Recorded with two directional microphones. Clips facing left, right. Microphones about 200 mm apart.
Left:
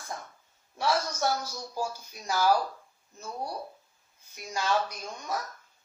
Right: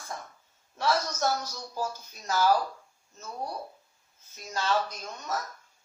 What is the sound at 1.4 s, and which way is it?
Speech, 10° left (ahead or behind).